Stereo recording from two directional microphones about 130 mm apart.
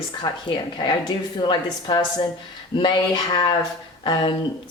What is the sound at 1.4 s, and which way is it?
Speech, 35° left (ahead or behind).